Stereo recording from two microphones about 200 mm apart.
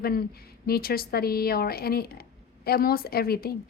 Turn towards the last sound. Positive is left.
turn(degrees=50)  # may be behind; listen again after turning